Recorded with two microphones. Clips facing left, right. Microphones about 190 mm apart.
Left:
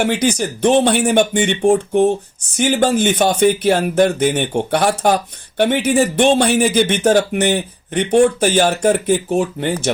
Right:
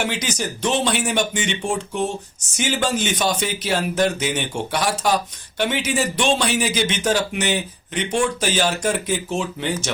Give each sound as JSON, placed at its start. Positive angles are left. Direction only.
{"t": 0.0, "sound": "speech", "side_deg": 55}